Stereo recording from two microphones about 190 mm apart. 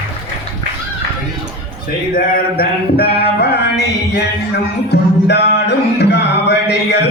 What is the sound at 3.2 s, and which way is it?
Music, 60° left (ahead or behind).